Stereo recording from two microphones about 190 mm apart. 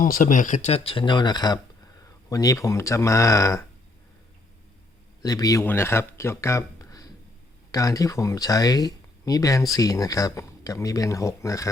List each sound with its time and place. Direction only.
0.0 s speech: 45° left (ahead or behind); by 3.7 s 15° left (ahead or behind)
5.2 s speech: 20° left (ahead or behind)